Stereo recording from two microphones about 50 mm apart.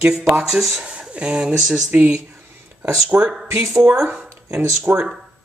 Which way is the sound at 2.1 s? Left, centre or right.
Right.